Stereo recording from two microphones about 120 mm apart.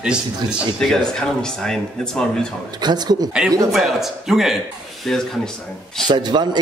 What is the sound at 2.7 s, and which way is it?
Speech, 35° right (ahead or behind).